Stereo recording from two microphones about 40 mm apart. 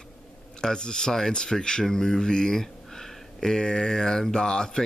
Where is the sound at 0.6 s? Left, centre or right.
Centre.